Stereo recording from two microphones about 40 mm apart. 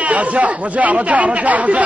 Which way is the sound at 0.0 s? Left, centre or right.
Right.